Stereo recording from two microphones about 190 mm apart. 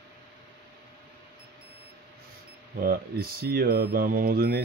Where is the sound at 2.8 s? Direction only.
50° right (ahead or behind).